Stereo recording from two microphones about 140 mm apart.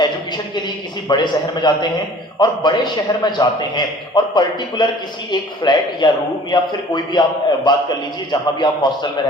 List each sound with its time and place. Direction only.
1.0 s a man's voice: 30° left (ahead or behind)